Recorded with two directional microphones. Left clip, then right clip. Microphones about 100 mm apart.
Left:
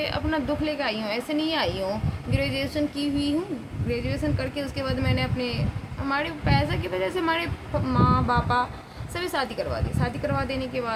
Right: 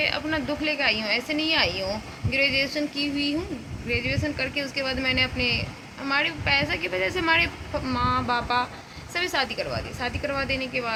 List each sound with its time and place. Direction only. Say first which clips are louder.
0.0 s a woman's voice: right 1 dB; 15° left (ahead or behind)